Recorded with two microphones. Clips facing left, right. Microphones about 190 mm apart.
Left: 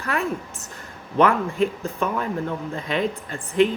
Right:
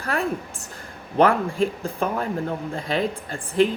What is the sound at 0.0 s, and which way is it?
A woman's voice, 35° right (ahead or behind).